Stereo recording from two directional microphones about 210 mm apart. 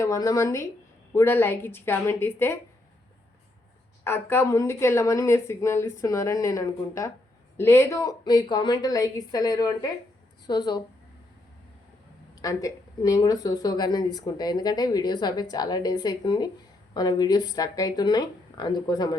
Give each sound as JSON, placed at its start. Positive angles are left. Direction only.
{"t": 0.0, "sound": "speech", "side_deg": 15}
{"t": 4.0, "sound": "speech", "side_deg": 10}
{"t": 12.4, "sound": "speech", "side_deg": 15}